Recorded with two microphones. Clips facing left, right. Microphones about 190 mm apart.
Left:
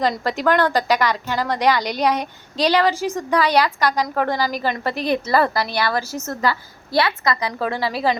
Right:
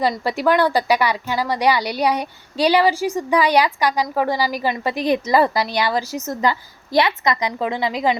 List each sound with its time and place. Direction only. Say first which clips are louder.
0.3 s a woman's voice: right 2 dB; 10° right (ahead or behind)